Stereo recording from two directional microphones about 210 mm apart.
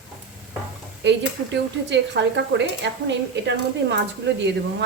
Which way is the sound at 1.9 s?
55° right (ahead or behind).